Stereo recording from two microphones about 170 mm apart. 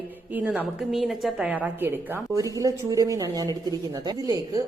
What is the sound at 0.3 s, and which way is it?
A woman's voice, 10° right (ahead or behind).